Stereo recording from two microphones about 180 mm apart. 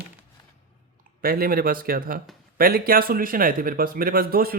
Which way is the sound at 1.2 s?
55° right (ahead or behind).